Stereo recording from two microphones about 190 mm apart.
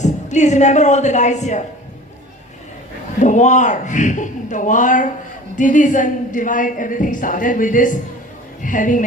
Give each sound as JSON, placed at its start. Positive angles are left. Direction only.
{"t": 0.0, "sound": "a woman's voice", "side_deg": 40}
{"t": 3.2, "sound": "a woman's voice", "side_deg": 40}